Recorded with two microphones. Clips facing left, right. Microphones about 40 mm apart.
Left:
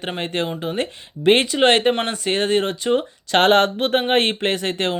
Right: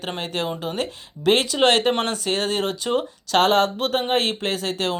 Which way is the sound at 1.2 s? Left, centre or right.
Left.